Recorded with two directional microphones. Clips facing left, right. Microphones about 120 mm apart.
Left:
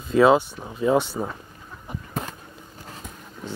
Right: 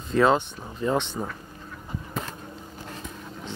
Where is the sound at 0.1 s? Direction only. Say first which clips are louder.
Left 4 dB; 5° left (ahead or behind).